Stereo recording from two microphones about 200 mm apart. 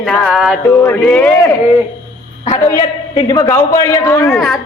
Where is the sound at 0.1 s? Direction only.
Centre (ahead or behind).